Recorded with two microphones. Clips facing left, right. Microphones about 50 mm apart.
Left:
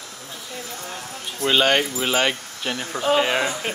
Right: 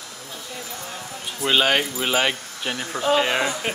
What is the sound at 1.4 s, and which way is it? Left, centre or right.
Speech, centre.